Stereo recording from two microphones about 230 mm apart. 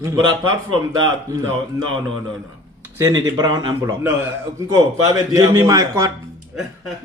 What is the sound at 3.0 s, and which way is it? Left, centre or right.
A man's voice, centre.